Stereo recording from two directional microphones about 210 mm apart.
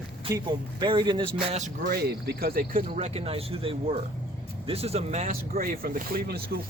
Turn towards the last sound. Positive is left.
turn(degrees=-45)  # may be behind; listen again after turning